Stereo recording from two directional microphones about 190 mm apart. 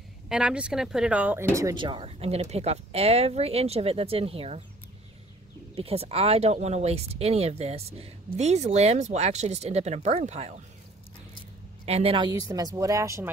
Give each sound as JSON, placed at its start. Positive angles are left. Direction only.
{"t": 0.3, "sound": "speech", "side_deg": -5}
{"t": 5.8, "sound": "speech", "side_deg": -30}
{"t": 11.8, "sound": "a woman's voice", "side_deg": -30}